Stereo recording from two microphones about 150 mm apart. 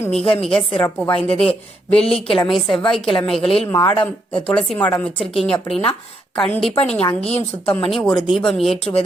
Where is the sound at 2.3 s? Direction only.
Centre (ahead or behind).